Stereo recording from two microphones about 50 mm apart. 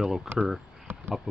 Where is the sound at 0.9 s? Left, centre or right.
Right.